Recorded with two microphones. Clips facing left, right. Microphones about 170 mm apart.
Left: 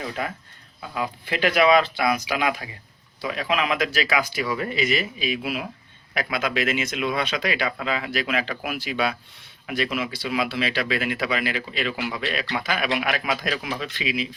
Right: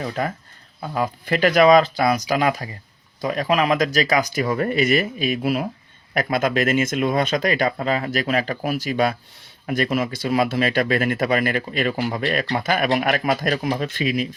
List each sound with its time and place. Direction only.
0.2 s speech: 40° right (ahead or behind)